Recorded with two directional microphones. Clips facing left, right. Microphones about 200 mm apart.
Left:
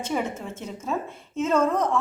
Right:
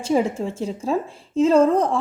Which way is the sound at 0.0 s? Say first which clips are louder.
Right 7 dB; 30° right (ahead or behind).